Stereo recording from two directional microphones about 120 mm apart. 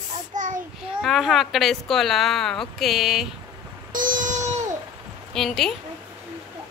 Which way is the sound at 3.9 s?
90° right.